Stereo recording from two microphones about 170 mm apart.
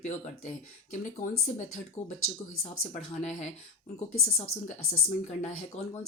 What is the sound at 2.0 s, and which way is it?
Speech, 40° left (ahead or behind).